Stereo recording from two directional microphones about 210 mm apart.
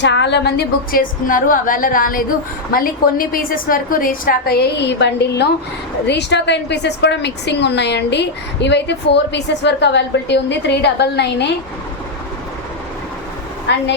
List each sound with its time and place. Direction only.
0.0 s a woman's voice: 60° left (ahead or behind)